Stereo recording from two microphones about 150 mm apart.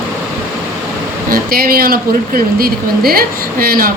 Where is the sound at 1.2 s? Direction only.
75° right (ahead or behind).